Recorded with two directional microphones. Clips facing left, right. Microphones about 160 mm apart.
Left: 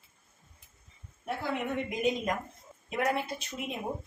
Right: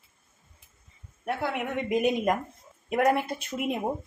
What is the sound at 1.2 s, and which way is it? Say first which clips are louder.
A woman's voice: right 3 dB; 70° right (ahead or behind).